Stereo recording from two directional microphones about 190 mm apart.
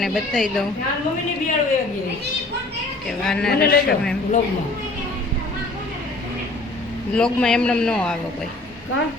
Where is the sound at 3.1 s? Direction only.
Centre (ahead or behind).